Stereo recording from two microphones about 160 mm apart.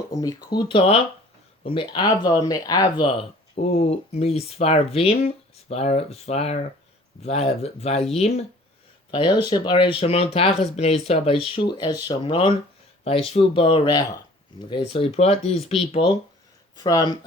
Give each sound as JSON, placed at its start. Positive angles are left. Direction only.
{"t": 0.1, "sound": "speech", "side_deg": 25}
{"t": 9.1, "sound": "speech", "side_deg": 30}
{"t": 16.7, "sound": "speech", "side_deg": 25}